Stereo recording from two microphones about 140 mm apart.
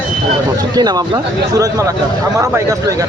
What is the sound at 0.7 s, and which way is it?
Speech, 30° right (ahead or behind).